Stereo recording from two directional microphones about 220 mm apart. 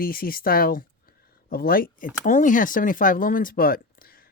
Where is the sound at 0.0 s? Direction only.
40° left (ahead or behind).